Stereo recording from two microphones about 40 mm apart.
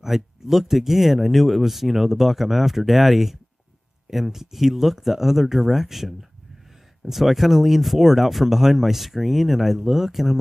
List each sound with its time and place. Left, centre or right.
0.0 s speech: centre